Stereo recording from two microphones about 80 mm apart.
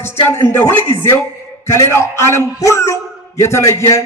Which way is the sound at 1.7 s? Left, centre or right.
Left.